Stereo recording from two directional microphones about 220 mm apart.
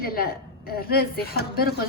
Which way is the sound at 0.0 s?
40° left (ahead or behind).